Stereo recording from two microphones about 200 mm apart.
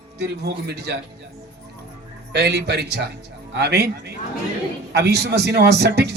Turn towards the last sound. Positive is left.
turn(degrees=-55)  # may be behind; listen again after turning